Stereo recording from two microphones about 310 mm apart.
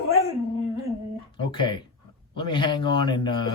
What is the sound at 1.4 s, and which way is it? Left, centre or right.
Speech, centre.